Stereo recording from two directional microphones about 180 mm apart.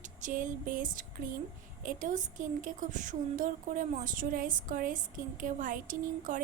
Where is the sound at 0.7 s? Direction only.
50° right (ahead or behind).